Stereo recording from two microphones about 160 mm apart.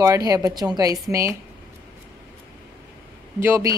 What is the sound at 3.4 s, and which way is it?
Speech, 15° right (ahead or behind).